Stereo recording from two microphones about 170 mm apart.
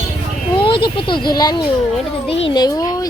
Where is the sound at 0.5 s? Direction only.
30° left (ahead or behind).